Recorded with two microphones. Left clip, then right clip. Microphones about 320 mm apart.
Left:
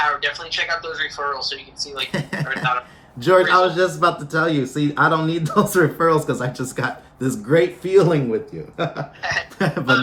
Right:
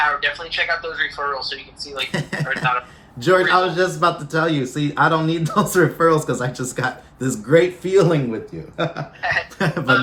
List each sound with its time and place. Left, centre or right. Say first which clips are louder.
0.0 s speech: right 1 dB; centre